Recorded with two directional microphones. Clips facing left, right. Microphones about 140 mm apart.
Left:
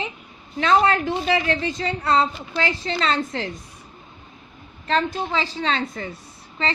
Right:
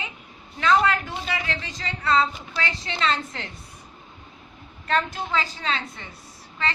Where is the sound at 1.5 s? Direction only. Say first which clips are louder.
Left 9 dB; 55° left (ahead or behind).